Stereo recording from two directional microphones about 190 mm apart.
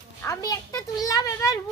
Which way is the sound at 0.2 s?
15° left (ahead or behind).